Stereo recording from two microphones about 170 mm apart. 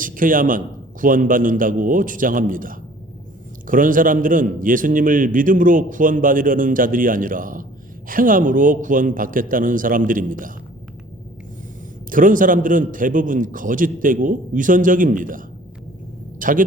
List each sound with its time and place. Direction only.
0.0 s a man's voice: 55° right (ahead or behind)
12.1 s a man's voice: 50° right (ahead or behind)